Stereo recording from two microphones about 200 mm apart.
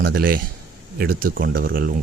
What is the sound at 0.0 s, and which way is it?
A man's voice, 50° right (ahead or behind).